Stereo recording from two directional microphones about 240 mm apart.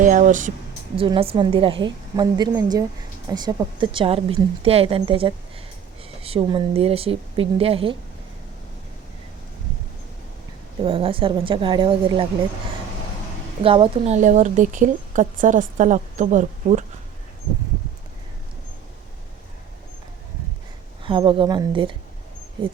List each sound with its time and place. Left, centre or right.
0.0 s speech: right
0.9 s a woman's voice: right
10.8 s a woman's voice: right
13.6 s speech: right
21.0 s a woman's voice: right